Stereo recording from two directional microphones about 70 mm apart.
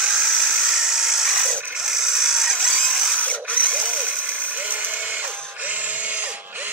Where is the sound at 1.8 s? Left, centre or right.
Centre.